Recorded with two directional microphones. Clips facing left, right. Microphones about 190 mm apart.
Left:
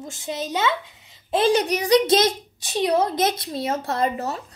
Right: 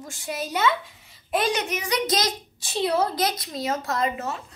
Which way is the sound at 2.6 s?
15° left (ahead or behind).